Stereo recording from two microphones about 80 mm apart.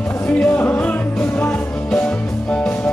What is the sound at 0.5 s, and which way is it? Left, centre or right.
Music, left.